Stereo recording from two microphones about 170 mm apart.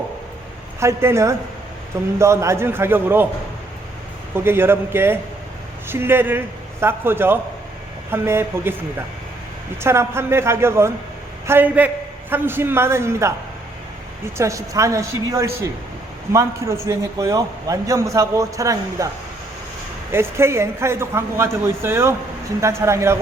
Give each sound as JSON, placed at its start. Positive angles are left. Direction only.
{"t": 0.8, "sound": "a man's voice", "side_deg": -15}
{"t": 4.4, "sound": "a man's voice", "side_deg": -15}
{"t": 14.3, "sound": "a man's voice", "side_deg": -20}
{"t": 20.1, "sound": "a man's voice", "side_deg": -15}